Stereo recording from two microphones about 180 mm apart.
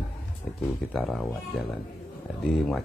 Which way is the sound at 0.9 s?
5° left (ahead or behind).